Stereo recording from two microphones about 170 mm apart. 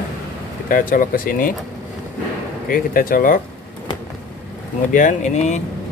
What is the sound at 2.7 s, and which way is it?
Speech, 55° left (ahead or behind).